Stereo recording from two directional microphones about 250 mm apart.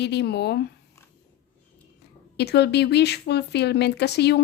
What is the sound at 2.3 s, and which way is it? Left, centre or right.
Speech, left.